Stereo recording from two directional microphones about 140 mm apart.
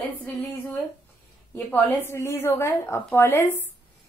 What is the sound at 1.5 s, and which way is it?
A woman's voice, 15° left (ahead or behind).